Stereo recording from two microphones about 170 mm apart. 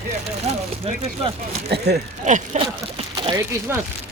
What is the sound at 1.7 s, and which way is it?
Speech, 75° right (ahead or behind).